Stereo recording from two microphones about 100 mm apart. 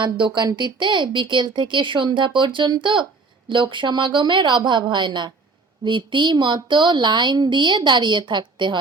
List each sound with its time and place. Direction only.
0.0 s speech: 50° right (ahead or behind)